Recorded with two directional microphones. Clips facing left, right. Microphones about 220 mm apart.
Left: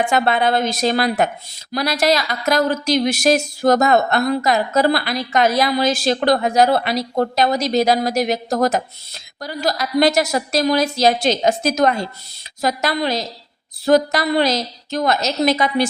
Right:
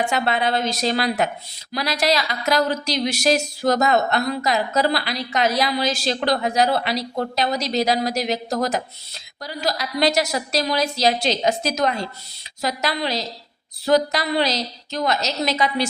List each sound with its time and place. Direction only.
0.1 s speech: 55° left (ahead or behind)